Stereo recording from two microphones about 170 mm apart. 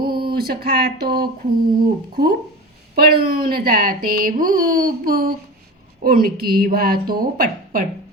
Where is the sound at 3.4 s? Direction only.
60° right (ahead or behind).